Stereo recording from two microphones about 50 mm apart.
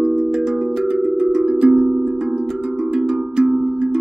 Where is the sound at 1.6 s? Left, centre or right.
Right.